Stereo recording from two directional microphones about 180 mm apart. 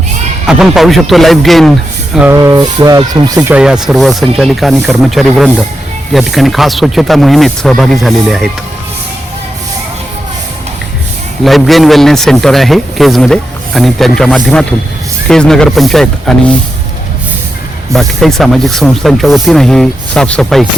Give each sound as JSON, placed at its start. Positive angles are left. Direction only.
{"t": 0.4, "sound": "a man's voice", "side_deg": -5}
{"t": 2.3, "sound": "music", "side_deg": -20}
{"t": 3.3, "sound": "a man's voice", "side_deg": -10}
{"t": 11.4, "sound": "a man's voice", "side_deg": 0}
{"t": 17.9, "sound": "a man's voice", "side_deg": 0}